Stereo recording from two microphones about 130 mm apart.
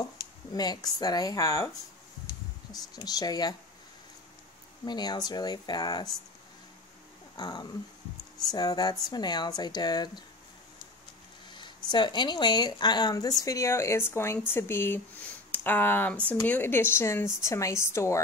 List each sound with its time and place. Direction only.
0.5 s speech: 30° left (ahead or behind)
2.7 s speech: 30° left (ahead or behind)
4.8 s speech: 35° left (ahead or behind)
7.3 s speech: 30° left (ahead or behind)
11.5 s speech: 35° left (ahead or behind)